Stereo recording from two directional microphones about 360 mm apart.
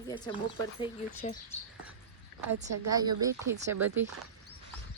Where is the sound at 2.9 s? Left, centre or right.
Centre.